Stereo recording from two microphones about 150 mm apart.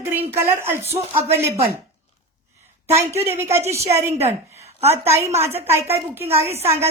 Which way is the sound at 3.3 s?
15° right (ahead or behind).